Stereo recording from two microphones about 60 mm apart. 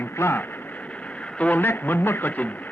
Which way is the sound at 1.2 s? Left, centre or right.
Left.